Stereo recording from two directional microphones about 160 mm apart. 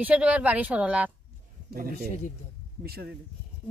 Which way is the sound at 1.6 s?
75° right (ahead or behind).